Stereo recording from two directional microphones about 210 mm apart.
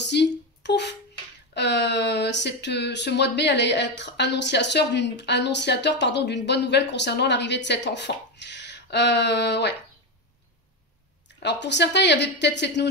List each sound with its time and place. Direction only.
0.0 s a sound: 55° left (ahead or behind)
1.5 s speech: 55° left (ahead or behind)
11.2 s speech: 55° left (ahead or behind)